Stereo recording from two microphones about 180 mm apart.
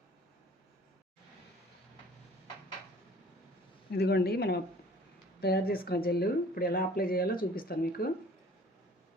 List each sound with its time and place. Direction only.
3.9 s speech: 60° left (ahead or behind)